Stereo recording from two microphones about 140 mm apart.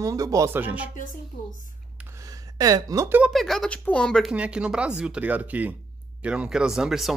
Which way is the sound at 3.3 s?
Centre (ahead or behind).